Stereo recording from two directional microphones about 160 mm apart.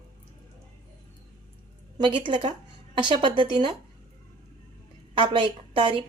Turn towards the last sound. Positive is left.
turn(degrees=-30)  # may be behind; listen again after turning